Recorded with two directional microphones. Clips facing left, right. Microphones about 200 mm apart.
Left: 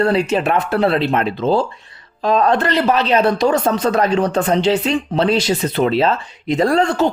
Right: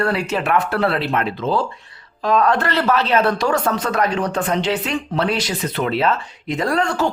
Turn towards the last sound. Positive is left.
turn(degrees=25)  # may be behind; listen again after turning